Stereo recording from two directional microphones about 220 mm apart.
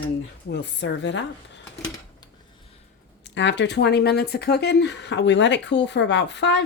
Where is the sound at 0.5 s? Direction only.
50° left (ahead or behind).